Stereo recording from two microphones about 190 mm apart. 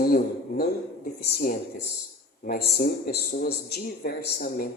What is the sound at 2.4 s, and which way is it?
A man's voice, 50° left (ahead or behind).